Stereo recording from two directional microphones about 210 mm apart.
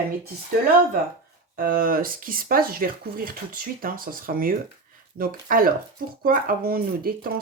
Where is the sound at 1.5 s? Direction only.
45° right (ahead or behind).